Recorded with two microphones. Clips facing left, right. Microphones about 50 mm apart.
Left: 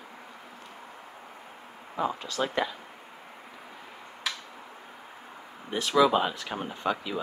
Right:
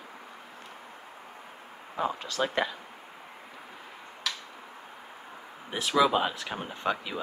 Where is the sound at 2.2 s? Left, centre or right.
Right.